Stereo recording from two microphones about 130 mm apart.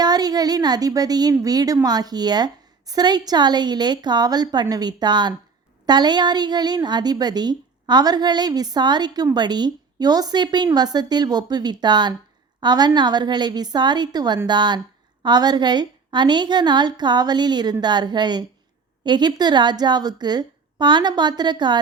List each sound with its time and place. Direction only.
0.0 s a woman's voice: 30° right (ahead or behind)